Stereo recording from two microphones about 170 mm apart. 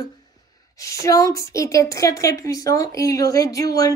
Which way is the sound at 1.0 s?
20° left (ahead or behind).